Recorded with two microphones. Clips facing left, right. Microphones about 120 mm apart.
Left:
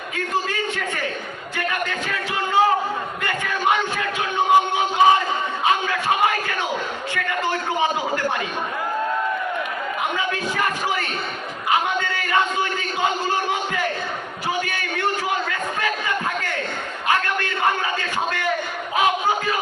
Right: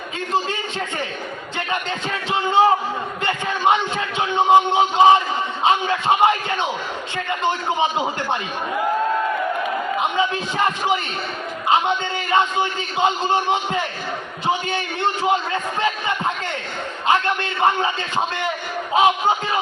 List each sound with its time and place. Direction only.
0.5 s a man's voice: 25° right (ahead or behind)
10.0 s a man's voice: 25° right (ahead or behind)
18.9 s a man's voice: 25° right (ahead or behind)